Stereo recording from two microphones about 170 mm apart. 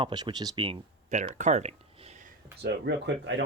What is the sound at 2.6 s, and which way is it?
Speech, 90° right.